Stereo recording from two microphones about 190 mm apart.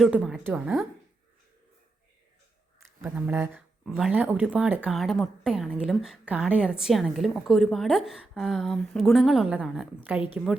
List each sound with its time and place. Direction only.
0.0 s speech: centre (ahead or behind)
3.0 s speech: 10° right (ahead or behind)